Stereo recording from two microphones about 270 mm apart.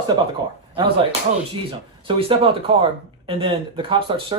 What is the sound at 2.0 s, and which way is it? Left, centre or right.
Speech, centre.